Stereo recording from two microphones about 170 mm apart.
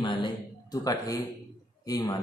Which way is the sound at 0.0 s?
30° left (ahead or behind).